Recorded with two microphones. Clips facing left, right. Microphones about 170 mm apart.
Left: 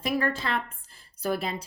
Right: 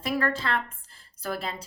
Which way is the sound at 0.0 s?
15° left (ahead or behind).